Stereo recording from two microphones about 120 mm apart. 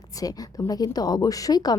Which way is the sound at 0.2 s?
30° left (ahead or behind).